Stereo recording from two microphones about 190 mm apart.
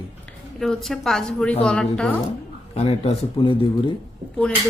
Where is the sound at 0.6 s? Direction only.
Centre (ahead or behind).